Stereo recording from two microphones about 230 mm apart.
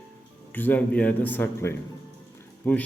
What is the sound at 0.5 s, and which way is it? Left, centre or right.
A man's voice, centre.